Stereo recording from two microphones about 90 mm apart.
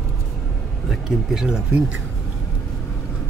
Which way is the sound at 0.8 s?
5° right (ahead or behind).